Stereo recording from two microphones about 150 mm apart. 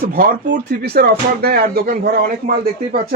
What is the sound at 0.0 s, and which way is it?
Speech, 75° right (ahead or behind).